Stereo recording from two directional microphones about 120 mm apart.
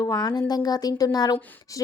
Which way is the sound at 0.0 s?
35° left (ahead or behind).